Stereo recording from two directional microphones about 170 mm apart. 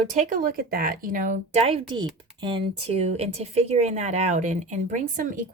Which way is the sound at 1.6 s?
30° right (ahead or behind).